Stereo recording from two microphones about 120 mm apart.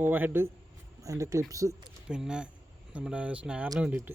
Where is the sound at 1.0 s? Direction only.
25° right (ahead or behind).